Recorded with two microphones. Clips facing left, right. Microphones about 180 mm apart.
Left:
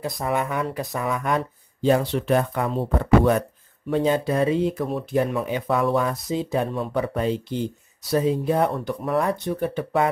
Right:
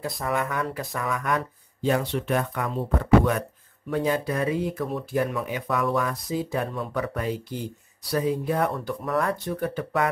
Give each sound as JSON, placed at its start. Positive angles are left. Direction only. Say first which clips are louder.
{"t": 0.0, "sound": "speech", "louder": "left 2 dB", "side_deg": 20}